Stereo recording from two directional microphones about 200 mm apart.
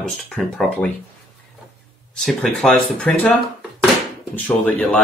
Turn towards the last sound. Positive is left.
turn(degrees=5)  # may be behind; listen again after turning